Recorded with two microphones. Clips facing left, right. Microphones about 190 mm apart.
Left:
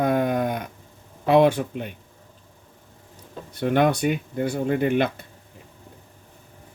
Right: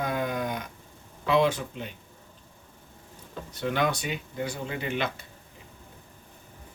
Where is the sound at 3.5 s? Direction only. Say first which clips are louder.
Left 7 dB; 55° left (ahead or behind).